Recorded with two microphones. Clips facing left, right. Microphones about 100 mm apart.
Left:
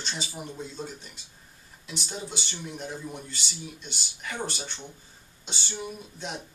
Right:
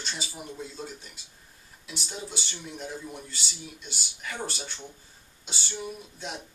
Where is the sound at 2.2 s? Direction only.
5° right (ahead or behind).